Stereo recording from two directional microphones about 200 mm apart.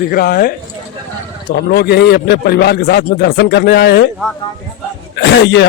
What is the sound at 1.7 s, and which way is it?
A man's voice, 55° left (ahead or behind).